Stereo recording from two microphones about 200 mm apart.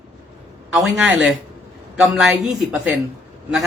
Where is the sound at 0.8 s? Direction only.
5° right (ahead or behind).